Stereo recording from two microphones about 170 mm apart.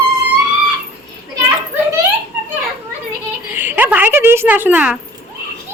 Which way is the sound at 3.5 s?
10° right (ahead or behind).